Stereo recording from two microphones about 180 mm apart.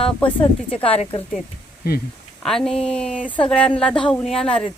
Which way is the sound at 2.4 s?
Centre (ahead or behind).